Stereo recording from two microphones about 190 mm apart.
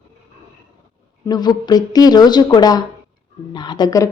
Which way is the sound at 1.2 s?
20° left (ahead or behind).